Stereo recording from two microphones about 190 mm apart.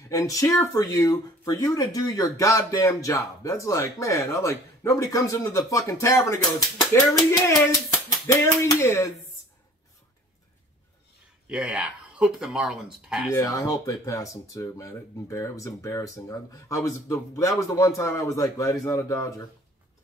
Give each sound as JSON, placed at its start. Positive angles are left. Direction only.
{"t": 0.1, "sound": "speech", "side_deg": 15}
{"t": 11.4, "sound": "speech", "side_deg": -5}
{"t": 13.3, "sound": "speech", "side_deg": 15}